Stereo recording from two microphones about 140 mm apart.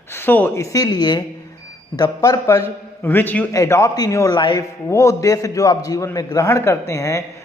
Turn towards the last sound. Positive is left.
turn(degrees=20)  # may be behind; listen again after turning